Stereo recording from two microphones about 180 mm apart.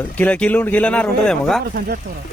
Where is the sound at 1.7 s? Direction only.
55° right (ahead or behind).